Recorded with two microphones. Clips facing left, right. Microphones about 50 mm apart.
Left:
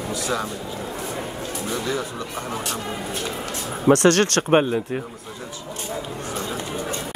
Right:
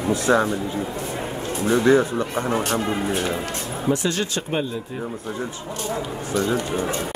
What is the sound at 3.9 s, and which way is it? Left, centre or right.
Speech, left.